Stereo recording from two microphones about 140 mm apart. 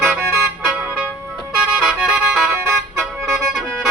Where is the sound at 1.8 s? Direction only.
Centre (ahead or behind).